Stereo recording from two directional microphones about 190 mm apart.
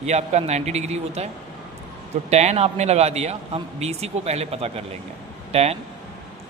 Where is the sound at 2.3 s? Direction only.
35° right (ahead or behind).